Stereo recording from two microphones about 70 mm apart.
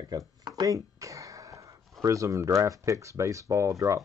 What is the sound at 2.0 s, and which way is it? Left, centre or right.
Speech, right.